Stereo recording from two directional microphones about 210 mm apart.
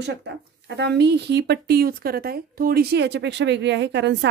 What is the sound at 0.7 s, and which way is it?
Speech, 55° right (ahead or behind).